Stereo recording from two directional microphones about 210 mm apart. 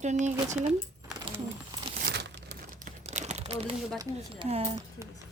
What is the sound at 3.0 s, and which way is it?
Crumpling, 30° right (ahead or behind).